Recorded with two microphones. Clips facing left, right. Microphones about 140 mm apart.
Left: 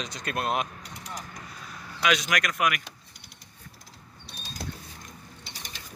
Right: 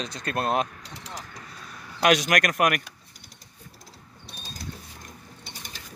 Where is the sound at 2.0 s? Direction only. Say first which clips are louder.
Right 5 dB; 50° right (ahead or behind).